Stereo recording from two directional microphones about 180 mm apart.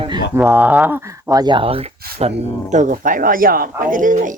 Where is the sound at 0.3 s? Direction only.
10° right (ahead or behind); by 4.4 s 45° right (ahead or behind).